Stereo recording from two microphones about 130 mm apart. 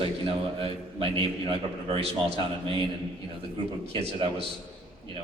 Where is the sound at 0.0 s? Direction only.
45° right (ahead or behind).